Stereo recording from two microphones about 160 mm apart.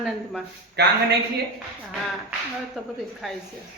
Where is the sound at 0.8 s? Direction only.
90° right.